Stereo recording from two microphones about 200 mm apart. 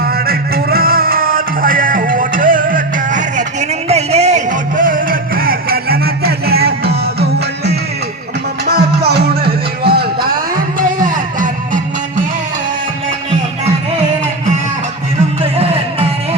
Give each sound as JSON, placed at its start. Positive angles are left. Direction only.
{"t": 0.0, "sound": "music", "side_deg": -50}
{"t": 15.5, "sound": "music", "side_deg": -30}